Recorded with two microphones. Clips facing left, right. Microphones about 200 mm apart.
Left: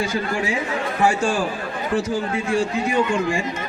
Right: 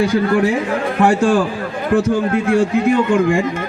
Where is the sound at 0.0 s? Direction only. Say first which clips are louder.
Right 9 dB; 60° right (ahead or behind).